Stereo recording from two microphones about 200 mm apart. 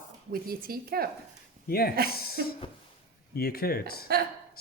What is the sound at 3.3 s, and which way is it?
Speech, 50° left (ahead or behind).